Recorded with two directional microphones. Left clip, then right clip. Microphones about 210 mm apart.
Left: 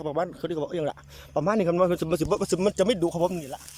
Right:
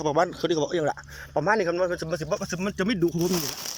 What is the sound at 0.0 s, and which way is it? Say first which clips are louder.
Speech: right 5 dB; 5° left (ahead or behind).